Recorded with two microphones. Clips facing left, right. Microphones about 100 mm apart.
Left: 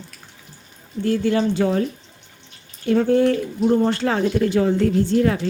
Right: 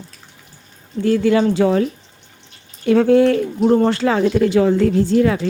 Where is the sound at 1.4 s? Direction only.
90° right.